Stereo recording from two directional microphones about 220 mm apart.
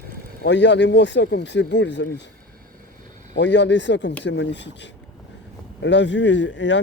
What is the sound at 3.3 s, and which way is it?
Speech, 55° left (ahead or behind).